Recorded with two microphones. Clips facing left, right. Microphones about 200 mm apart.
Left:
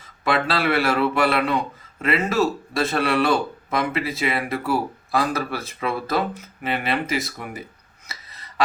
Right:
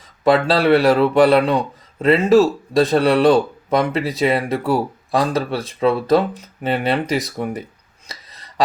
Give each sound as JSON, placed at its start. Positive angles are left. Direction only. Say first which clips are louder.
{"t": 0.3, "sound": "speech", "louder": "right 8 dB", "side_deg": -35}